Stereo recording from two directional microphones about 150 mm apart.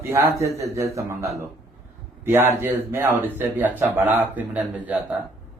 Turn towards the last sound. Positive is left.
turn(degrees=-10)  # may be behind; listen again after turning